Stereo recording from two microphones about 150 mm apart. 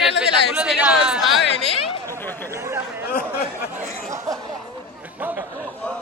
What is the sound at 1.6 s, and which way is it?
Chatter, 40° left (ahead or behind).